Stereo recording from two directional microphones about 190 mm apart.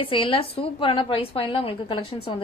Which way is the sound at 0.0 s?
30° left (ahead or behind).